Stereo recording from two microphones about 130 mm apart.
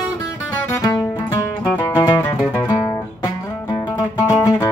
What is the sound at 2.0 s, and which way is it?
Music, 35° left (ahead or behind).